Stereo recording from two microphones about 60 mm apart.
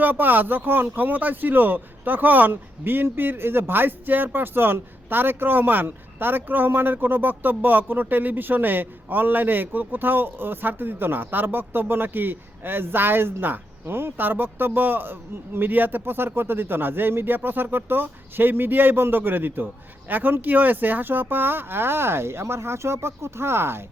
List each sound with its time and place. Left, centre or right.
0.0 s speech: right